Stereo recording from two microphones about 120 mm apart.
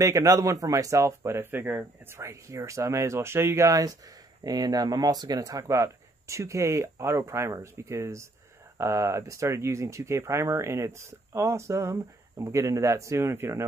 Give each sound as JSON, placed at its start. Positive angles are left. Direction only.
{"t": 0.0, "sound": "speech", "side_deg": -25}